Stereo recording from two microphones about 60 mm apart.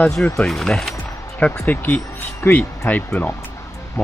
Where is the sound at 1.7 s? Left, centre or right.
Left.